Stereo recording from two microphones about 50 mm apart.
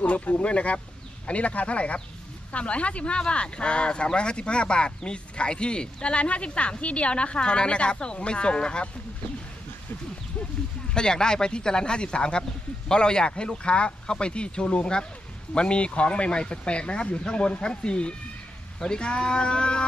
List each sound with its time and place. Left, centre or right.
0.0 s speech: left
10.9 s speech: centre